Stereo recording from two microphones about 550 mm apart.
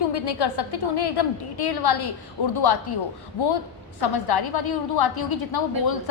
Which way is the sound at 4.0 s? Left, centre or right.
Left.